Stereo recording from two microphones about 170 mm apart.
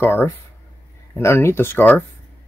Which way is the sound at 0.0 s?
15° left (ahead or behind).